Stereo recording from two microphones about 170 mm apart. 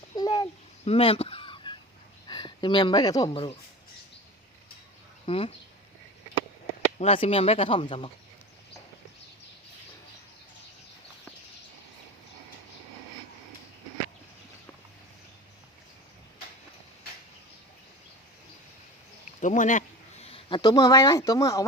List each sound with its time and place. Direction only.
0.2 s a sound: 20° left (ahead or behind)
0.9 s a sound: 35° left (ahead or behind)
2.2 s speech: 25° left (ahead or behind)
5.2 s speech: 35° left (ahead or behind)
7.0 s speech: 35° left (ahead or behind)
19.4 s speech: 45° left (ahead or behind); by 21.6 s 20° left (ahead or behind)